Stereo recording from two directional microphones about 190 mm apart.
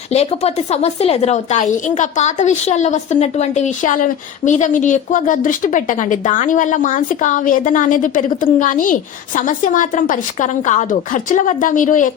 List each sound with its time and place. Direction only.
0.1 s a woman's voice: 35° left (ahead or behind)